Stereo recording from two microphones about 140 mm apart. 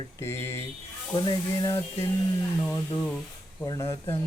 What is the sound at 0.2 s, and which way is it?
Mantra, 20° left (ahead or behind).